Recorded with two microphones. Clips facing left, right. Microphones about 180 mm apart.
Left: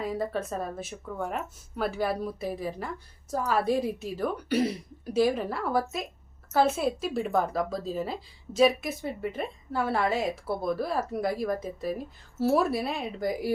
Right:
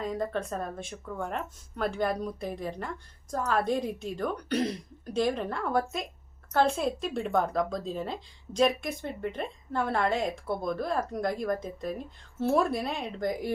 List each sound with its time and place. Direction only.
0.0 s speech: 5° left (ahead or behind)